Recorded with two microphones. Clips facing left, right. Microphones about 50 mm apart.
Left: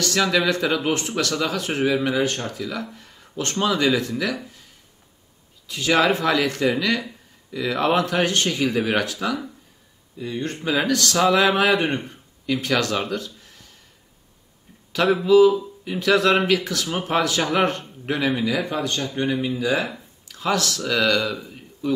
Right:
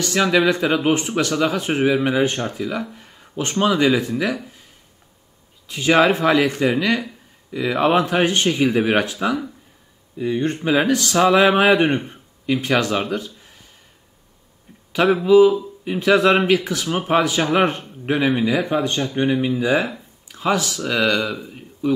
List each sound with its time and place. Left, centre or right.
0.0 s speech: centre
5.7 s speech: right
5.9 s speech: centre
13.2 s a sound: centre
15.2 s speech: centre